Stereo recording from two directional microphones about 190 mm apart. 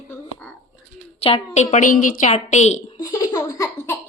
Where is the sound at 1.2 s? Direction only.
30° left (ahead or behind).